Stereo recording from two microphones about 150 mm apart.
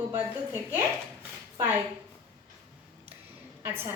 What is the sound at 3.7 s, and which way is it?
Speech, 15° right (ahead or behind).